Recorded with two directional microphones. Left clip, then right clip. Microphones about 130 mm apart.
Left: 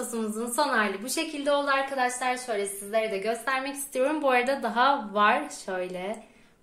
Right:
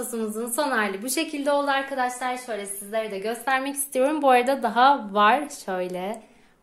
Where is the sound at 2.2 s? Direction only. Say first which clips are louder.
Left 1 dB; 30° right (ahead or behind).